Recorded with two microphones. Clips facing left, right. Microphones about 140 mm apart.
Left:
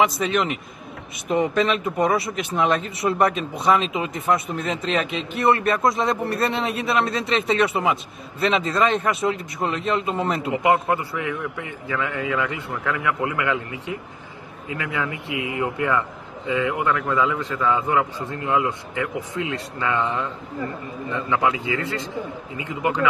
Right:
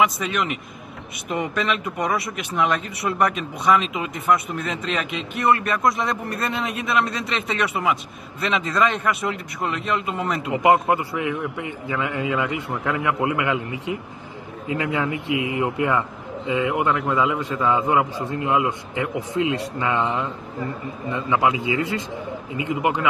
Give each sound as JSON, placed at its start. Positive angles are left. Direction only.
{"t": 0.0, "sound": "a man's voice", "side_deg": 30}
{"t": 10.5, "sound": "a man's voice", "side_deg": -20}